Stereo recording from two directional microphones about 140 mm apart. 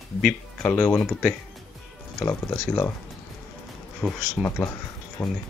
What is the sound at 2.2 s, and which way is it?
Speech, 20° left (ahead or behind).